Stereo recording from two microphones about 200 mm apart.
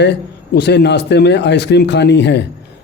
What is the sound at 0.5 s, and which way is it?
Speech, 55° left (ahead or behind).